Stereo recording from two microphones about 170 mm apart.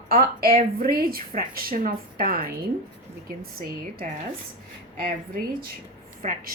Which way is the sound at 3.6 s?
55° right (ahead or behind).